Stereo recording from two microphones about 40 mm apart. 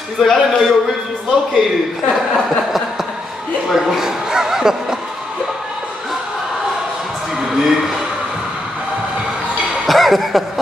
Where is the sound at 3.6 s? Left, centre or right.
Centre.